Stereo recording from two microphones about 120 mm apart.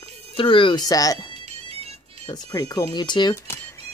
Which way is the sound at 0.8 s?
30° left (ahead or behind).